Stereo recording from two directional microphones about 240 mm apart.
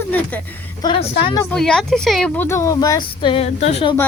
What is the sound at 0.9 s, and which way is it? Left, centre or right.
Speech, centre.